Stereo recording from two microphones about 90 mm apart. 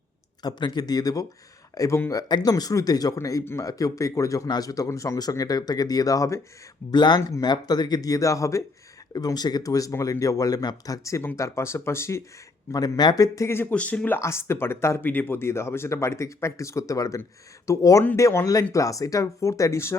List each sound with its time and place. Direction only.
0.4 s speech: 50° left (ahead or behind)
6.9 s speech: 55° left (ahead or behind); by 12.2 s 30° left (ahead or behind)
12.7 s speech: 45° left (ahead or behind)
13.7 s speech: 15° left (ahead or behind)
14.2 s speech: 30° left (ahead or behind)